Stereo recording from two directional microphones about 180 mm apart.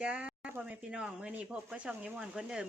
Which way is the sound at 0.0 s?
5° right (ahead or behind).